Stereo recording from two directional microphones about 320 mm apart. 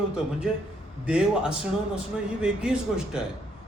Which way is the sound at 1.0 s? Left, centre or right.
Centre.